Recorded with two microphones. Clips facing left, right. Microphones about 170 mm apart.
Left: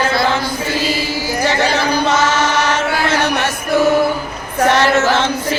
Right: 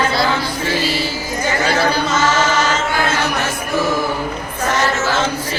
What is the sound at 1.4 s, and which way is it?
Chant, 75° left (ahead or behind).